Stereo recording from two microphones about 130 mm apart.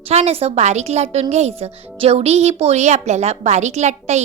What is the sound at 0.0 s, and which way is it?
A woman's voice, 55° right (ahead or behind).